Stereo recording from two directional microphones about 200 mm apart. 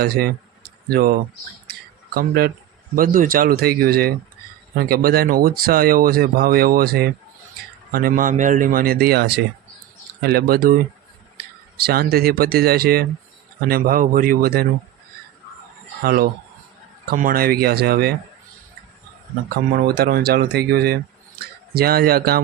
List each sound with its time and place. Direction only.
0.0 s speech: 50° right (ahead or behind)
2.1 s speech: 50° right (ahead or behind)
16.0 s speech: 50° right (ahead or behind)
19.7 s speech: 55° right (ahead or behind)